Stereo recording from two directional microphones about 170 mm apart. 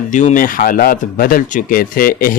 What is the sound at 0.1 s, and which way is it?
Speech, 45° left (ahead or behind).